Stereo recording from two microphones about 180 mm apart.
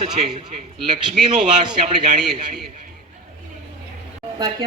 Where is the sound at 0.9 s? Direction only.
25° right (ahead or behind).